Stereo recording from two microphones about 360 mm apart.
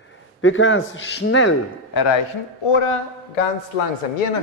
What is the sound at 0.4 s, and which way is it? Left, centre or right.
A man's voice, left.